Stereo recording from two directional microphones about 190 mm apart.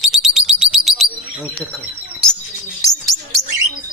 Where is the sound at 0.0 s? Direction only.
Centre (ahead or behind).